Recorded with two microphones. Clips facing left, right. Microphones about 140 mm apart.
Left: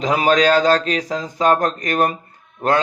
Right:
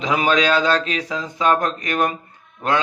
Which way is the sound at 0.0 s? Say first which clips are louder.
Left 3 dB; 40° left (ahead or behind).